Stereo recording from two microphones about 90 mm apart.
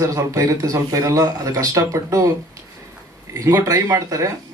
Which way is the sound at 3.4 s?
40° right (ahead or behind).